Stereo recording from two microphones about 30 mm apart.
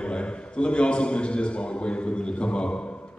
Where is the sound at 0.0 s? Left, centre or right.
Left.